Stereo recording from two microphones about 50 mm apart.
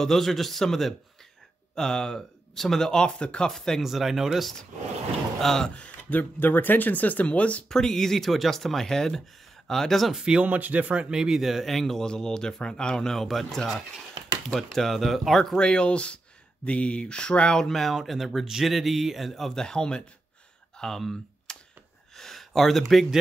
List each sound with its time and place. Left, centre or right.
0.0 s speech: centre
3.8 s speech: centre
5.4 s speech: centre
5.7 s speech: left
7.7 s speech: centre
10.1 s speech: centre
10.4 s speech: right
11.1 s speech: centre; by 17.6 s left
17.6 s speech: centre
19.5 s speech: centre
22.1 s a sound: centre